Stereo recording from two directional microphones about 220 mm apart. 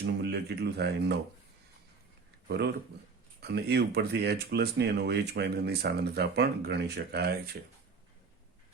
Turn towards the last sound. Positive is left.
turn(degrees=-45)  # may be behind; listen again after turning